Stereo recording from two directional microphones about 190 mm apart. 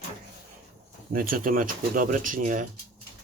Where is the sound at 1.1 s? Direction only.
50° right (ahead or behind).